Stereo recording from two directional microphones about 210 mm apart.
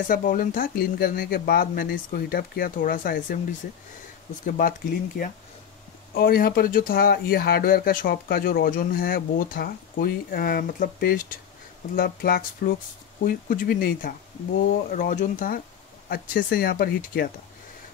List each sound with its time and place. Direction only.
0.1 s speech: 40° left (ahead or behind)
4.5 s speech: 40° left (ahead or behind)
6.1 s speech: 45° left (ahead or behind)